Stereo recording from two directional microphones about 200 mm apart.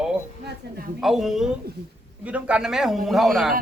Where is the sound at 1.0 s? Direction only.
Centre (ahead or behind).